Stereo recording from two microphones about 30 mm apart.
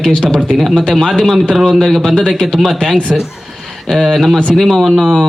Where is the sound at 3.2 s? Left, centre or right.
Centre.